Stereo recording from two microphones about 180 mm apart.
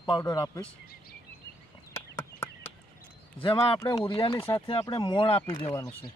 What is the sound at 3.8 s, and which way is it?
Speech, 25° left (ahead or behind).